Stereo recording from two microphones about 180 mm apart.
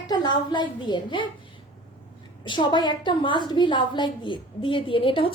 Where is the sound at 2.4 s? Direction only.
25° left (ahead or behind).